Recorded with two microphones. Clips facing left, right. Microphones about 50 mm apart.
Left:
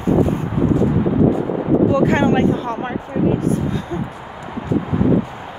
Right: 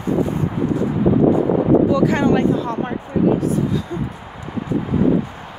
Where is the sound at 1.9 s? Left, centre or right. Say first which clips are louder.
Left 1 dB; left.